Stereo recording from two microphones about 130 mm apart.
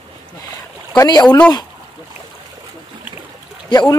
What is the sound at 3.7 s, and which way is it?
Speech, 35° left (ahead or behind).